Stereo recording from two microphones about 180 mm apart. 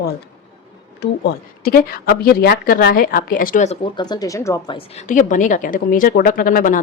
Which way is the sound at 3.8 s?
25° left (ahead or behind).